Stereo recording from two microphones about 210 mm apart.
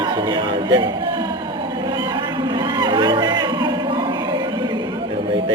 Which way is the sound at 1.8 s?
20° right (ahead or behind).